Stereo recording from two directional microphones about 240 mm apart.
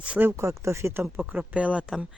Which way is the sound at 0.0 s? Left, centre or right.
Centre.